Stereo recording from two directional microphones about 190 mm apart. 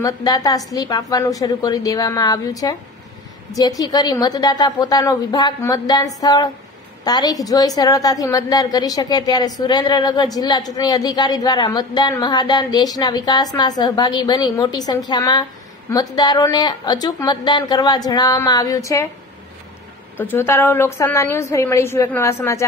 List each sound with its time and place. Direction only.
0.0 s a woman's voice: 20° left (ahead or behind)
20.2 s a woman's voice: 10° left (ahead or behind)